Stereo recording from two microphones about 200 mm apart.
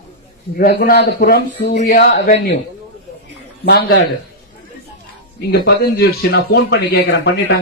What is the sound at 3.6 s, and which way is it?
Speech, 55° left (ahead or behind).